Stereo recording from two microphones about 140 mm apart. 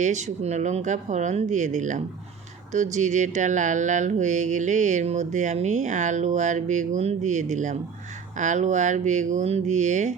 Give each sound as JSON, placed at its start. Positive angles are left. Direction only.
{"t": 0.0, "sound": "speech", "side_deg": -55}